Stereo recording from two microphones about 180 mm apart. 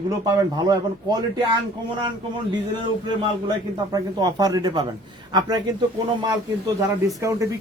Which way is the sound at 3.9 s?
20° right (ahead or behind).